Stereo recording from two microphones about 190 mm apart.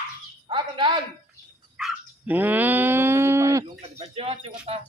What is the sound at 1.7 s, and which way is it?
Dog, 5° right (ahead or behind).